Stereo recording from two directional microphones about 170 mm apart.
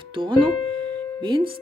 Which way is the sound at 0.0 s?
30° right (ahead or behind).